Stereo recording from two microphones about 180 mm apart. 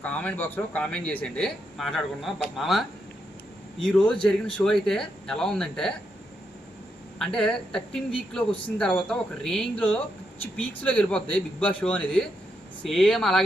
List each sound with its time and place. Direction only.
0.0 s speech: 10° left (ahead or behind)
7.2 s speech: 5° left (ahead or behind)